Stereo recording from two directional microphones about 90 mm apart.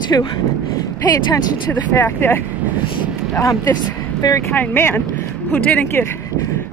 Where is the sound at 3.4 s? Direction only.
40° left (ahead or behind).